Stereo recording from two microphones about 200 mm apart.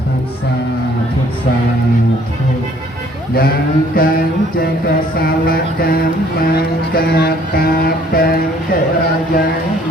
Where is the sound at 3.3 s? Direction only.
50° left (ahead or behind).